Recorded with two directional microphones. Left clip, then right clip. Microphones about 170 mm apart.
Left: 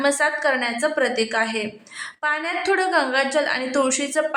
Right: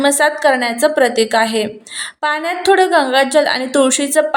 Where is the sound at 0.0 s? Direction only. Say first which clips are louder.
Right 7 dB; 30° right (ahead or behind).